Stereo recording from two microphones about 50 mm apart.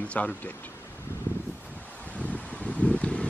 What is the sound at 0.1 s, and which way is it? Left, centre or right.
Speech, left.